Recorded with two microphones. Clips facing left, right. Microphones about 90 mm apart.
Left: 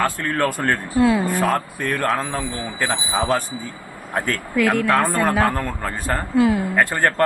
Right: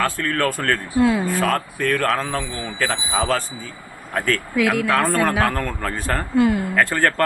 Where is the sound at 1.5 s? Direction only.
20° left (ahead or behind).